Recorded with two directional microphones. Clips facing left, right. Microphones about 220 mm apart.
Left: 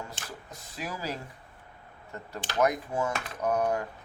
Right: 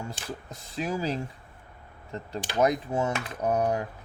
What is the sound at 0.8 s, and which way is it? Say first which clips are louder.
Speech: right 7 dB; 25° right (ahead or behind).